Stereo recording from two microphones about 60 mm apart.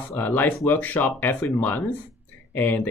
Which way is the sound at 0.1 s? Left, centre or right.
Left.